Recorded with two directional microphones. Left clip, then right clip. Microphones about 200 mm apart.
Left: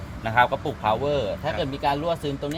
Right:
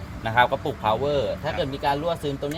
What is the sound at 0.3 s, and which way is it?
Speech, 20° right (ahead or behind).